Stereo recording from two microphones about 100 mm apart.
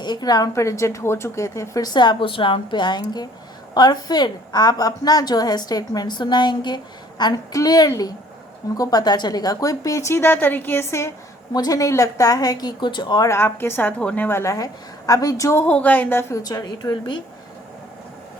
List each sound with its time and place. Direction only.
0.0 s a woman's voice: 45° left (ahead or behind); by 11.1 s 25° left (ahead or behind)
11.5 s a woman's voice: 40° left (ahead or behind)
13.2 s a woman's voice: 25° left (ahead or behind)
14.3 s a woman's voice: 25° left (ahead or behind)
15.6 s speech: 15° left (ahead or behind)
16.3 s a woman's voice: 40° left (ahead or behind)